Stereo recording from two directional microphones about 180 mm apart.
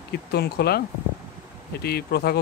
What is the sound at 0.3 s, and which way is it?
Speech, 65° left (ahead or behind).